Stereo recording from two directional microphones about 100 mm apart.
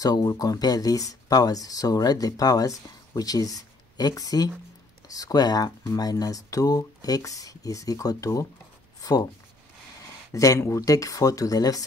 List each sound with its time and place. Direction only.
0.0 s speech: 40° left (ahead or behind)
10.3 s speech: 35° left (ahead or behind)